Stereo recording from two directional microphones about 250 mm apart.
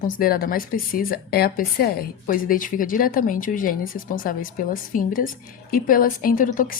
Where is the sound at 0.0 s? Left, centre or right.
Left.